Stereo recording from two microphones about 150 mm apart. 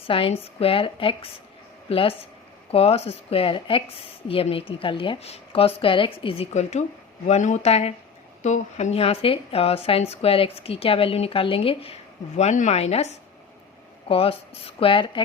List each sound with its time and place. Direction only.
0.1 s a woman's voice: 40° left (ahead or behind)
12.4 s a woman's voice: 50° left (ahead or behind)